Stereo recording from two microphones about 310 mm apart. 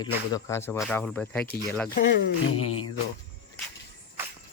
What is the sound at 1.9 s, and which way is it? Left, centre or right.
Speech, left.